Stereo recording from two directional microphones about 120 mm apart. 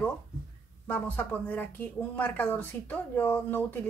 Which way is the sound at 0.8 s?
15° left (ahead or behind).